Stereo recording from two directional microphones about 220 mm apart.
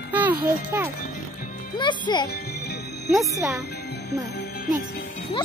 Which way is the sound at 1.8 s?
20° left (ahead or behind).